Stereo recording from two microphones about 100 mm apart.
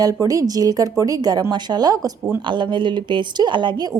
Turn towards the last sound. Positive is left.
turn(degrees=-45)  # may be behind; listen again after turning